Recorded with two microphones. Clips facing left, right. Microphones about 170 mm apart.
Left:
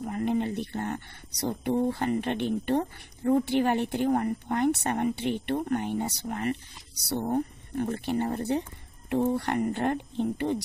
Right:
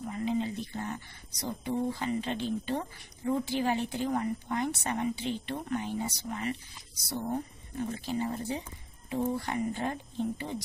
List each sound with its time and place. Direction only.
0.0 s a woman's voice: 60° left (ahead or behind)
7.2 s a woman's voice: 55° left (ahead or behind)